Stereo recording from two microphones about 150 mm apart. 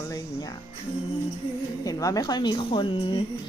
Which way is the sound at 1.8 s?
25° left (ahead or behind).